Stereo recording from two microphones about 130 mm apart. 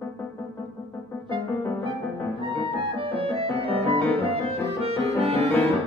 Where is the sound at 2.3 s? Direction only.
45° right (ahead or behind).